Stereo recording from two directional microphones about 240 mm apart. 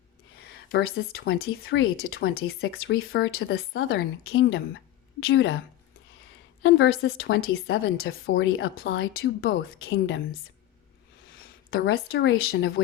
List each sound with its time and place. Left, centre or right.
0.3 s speech: left
1.3 s a woman's voice: left
2.1 s speech: left
3.7 s a woman's voice: left
6.6 s a woman's voice: left
7.7 s a woman's voice: left
11.3 s speech: left